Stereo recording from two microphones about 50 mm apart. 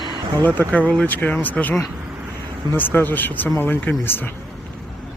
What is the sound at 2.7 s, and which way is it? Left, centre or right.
Speech, left.